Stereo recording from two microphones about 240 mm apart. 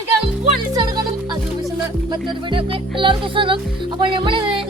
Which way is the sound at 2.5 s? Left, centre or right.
Right.